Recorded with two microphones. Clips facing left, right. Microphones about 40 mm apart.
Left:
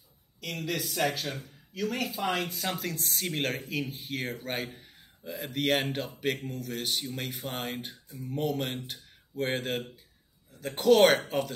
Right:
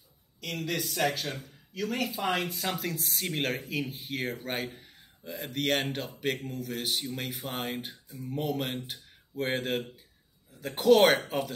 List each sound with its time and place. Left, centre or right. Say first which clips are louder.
0.4 s speech: even; centre